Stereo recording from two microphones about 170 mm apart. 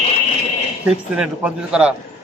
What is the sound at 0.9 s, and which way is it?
Speech, 5° right (ahead or behind).